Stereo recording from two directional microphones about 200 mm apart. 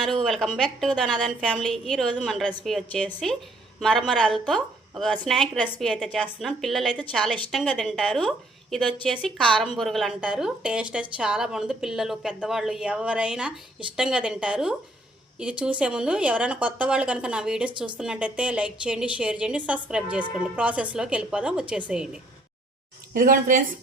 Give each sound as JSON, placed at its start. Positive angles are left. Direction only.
{"t": 0.0, "sound": "a woman's voice", "side_deg": 0}
{"t": 23.1, "sound": "speech", "side_deg": -45}